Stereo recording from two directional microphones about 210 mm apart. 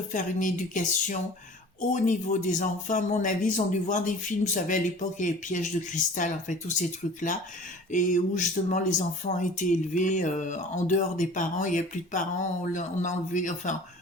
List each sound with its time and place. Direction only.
0.1 s speech: 40° left (ahead or behind)